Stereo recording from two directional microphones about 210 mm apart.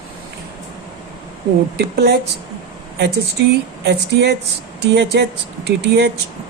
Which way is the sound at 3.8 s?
55° right (ahead or behind).